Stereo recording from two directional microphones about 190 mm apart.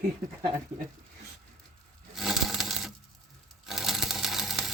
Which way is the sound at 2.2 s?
Centre (ahead or behind).